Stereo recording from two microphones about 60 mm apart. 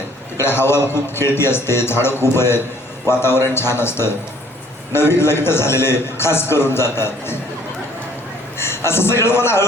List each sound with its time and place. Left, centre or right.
0.3 s a man's voice: left
8.5 s a man's voice: left